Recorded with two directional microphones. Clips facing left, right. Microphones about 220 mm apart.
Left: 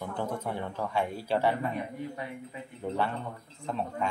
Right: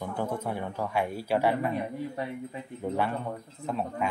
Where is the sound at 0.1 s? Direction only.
10° right (ahead or behind).